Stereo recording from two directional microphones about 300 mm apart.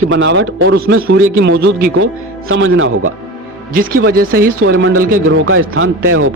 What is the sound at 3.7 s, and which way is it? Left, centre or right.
Speech, right.